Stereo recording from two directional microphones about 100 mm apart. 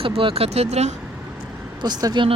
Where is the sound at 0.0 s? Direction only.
65° right (ahead or behind); by 0.9 s 90° right.